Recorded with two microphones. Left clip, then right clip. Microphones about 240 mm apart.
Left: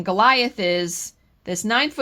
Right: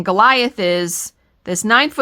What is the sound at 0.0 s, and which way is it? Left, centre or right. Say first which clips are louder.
Speech: right 4 dB; right.